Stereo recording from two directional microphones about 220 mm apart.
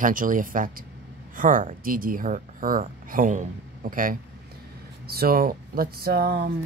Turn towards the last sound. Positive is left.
turn(degrees=-45)  # may be behind; listen again after turning